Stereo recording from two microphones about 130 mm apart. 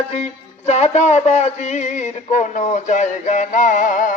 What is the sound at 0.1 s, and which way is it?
Music, 50° left (ahead or behind).